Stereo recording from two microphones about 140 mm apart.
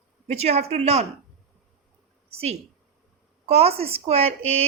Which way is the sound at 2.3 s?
45° right (ahead or behind).